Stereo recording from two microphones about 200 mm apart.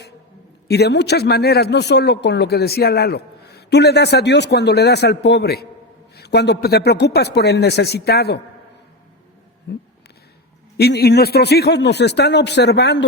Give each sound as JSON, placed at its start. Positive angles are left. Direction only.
{"t": 0.7, "sound": "speech", "side_deg": 55}
{"t": 9.7, "sound": "speech", "side_deg": 55}